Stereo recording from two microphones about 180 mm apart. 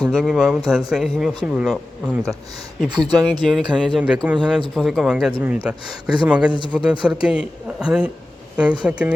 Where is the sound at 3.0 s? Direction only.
20° right (ahead or behind).